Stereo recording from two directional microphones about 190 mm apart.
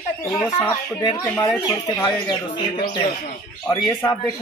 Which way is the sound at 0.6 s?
20° left (ahead or behind).